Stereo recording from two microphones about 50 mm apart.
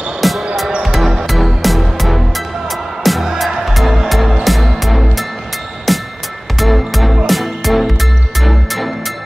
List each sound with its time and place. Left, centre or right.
0.2 s music: centre